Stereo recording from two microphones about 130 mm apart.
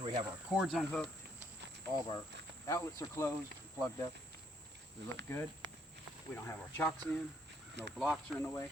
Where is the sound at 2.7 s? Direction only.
25° left (ahead or behind).